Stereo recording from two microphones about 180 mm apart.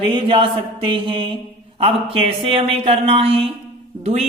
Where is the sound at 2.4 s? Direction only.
30° right (ahead or behind).